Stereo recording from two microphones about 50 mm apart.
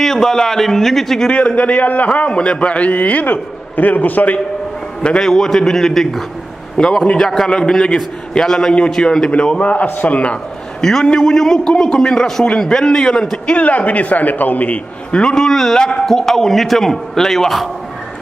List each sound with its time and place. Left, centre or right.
0.0 s a man's voice: centre
1.3 s a man's voice: left
5.0 s a man's voice: centre
9.3 s a man's voice: left
10.8 s a man's voice: centre
13.6 s a man's voice: left
15.0 s a man's voice: centre